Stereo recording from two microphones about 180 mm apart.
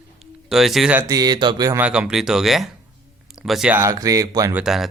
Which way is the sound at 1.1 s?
20° right (ahead or behind).